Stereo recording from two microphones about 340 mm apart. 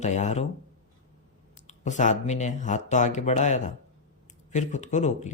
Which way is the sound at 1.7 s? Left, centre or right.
Left.